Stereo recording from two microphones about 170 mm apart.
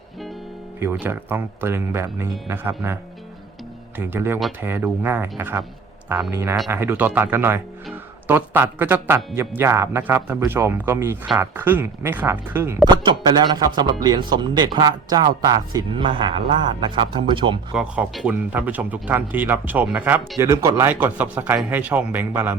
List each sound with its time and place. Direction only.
0.8 s speech: 10° right (ahead or behind)
6.3 s speech: 15° right (ahead or behind)
17.7 s speech: 5° right (ahead or behind)